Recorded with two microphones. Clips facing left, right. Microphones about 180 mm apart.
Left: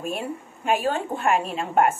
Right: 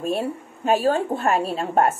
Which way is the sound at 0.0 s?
35° right (ahead or behind).